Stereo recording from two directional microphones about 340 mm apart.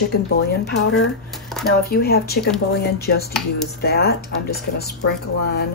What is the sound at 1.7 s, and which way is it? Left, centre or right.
Speech, left.